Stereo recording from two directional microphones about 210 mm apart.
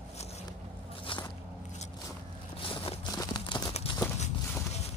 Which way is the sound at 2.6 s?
25° left (ahead or behind).